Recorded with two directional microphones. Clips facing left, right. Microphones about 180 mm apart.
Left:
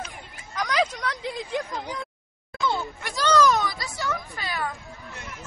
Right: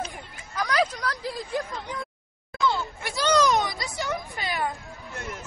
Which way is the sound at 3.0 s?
10° right (ahead or behind).